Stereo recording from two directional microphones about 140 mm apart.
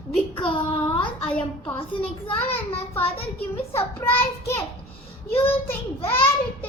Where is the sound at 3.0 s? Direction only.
10° left (ahead or behind).